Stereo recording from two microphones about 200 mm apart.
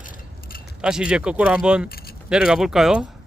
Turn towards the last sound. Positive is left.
turn(degrees=-5)  # may be behind; listen again after turning